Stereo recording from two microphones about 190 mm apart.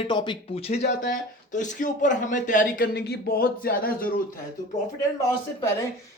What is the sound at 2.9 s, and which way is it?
Speech, 60° left (ahead or behind).